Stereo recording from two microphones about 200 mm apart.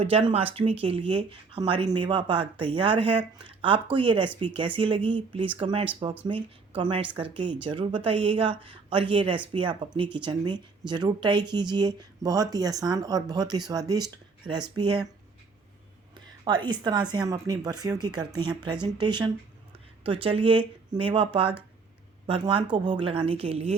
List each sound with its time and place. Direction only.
0.0 s speech: 30° right (ahead or behind)
16.4 s speech: 20° right (ahead or behind)
22.3 s speech: 25° right (ahead or behind)